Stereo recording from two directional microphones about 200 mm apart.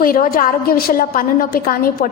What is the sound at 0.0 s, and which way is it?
A woman's voice, 45° left (ahead or behind).